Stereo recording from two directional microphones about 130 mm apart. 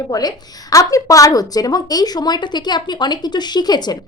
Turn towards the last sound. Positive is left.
turn(degrees=30)  # may be behind; listen again after turning